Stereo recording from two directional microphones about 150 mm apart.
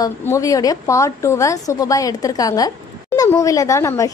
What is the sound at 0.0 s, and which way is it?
Speech, 25° left (ahead or behind).